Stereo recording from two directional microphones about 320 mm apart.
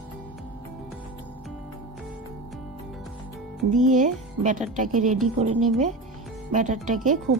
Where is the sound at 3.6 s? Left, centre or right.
Right.